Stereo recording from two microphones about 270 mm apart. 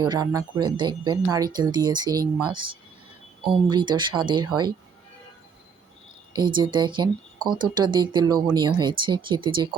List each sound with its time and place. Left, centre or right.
0.0 s speech: centre
3.4 s speech: centre
6.3 s speech: centre